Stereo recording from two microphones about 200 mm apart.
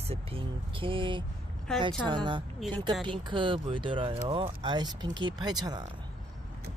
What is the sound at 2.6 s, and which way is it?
Speech, centre (ahead or behind).